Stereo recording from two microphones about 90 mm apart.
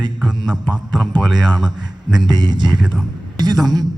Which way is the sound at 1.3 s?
55° right (ahead or behind).